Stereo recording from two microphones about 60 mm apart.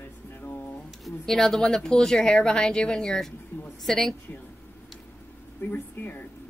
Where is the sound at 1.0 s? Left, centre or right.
Centre.